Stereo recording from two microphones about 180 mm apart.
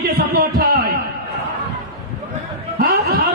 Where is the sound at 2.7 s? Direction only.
55° right (ahead or behind).